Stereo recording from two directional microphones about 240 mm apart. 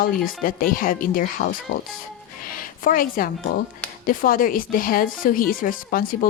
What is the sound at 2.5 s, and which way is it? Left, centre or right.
A woman's voice, left.